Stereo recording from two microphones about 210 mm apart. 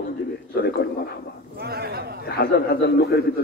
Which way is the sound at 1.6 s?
50° right (ahead or behind).